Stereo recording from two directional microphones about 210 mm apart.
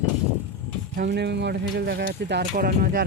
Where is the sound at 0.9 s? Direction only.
50° right (ahead or behind).